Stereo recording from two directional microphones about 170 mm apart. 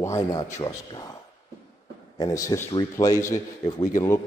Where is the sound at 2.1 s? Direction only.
20° left (ahead or behind).